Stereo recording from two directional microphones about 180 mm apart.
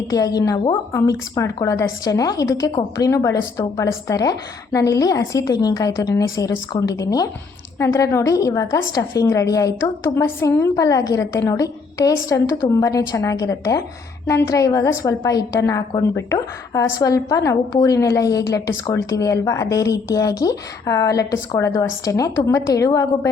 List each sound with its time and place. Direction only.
0.1 s a woman's voice: 20° left (ahead or behind)